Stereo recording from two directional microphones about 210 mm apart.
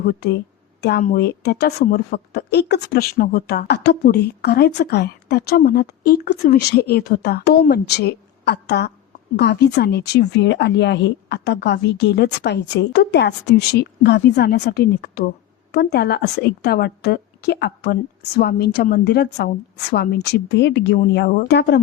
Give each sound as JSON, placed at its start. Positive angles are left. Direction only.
{"t": 0.0, "sound": "a woman's voice", "side_deg": 50}